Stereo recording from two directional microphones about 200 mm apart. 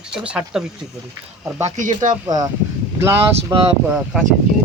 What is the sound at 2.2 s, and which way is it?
Speech, 20° right (ahead or behind).